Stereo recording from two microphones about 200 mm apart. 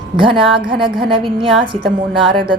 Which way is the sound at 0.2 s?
25° right (ahead or behind).